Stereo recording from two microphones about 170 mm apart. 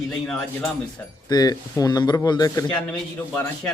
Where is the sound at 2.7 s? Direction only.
10° left (ahead or behind).